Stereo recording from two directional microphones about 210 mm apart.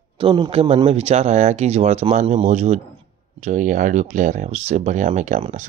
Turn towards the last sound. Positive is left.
turn(degrees=-35)  # may be behind; listen again after turning